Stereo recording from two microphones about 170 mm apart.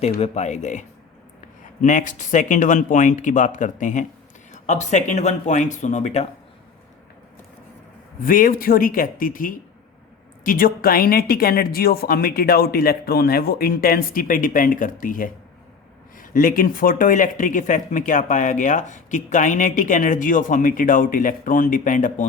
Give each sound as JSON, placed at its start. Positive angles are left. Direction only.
{"t": 0.0, "sound": "speech", "side_deg": 40}
{"t": 8.2, "sound": "a woman's voice", "side_deg": 55}